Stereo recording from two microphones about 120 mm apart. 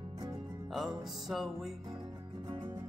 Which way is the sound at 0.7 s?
Centre (ahead or behind).